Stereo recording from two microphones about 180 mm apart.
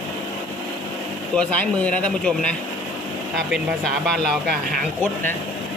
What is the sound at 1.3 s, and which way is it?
Speech, 5° left (ahead or behind).